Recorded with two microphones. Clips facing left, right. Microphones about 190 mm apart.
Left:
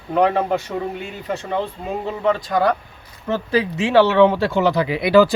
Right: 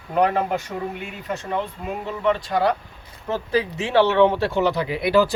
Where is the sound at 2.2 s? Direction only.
45° left (ahead or behind).